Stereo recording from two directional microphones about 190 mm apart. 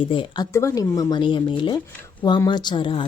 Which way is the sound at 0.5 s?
15° left (ahead or behind).